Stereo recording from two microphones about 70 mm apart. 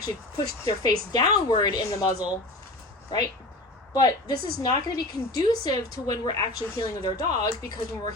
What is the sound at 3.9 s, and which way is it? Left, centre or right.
A woman's voice, left.